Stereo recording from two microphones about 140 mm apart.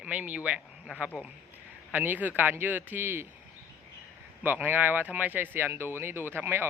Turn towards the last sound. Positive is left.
turn(degrees=-15)  # may be behind; listen again after turning